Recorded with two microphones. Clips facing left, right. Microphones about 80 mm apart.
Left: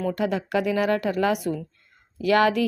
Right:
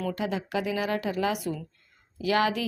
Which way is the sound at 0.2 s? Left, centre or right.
Left.